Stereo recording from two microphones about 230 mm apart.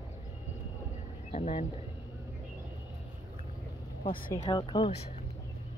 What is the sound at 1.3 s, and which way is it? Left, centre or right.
Speech, left.